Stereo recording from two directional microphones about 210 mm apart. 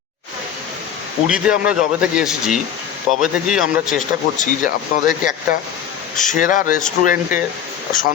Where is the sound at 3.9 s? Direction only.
40° left (ahead or behind).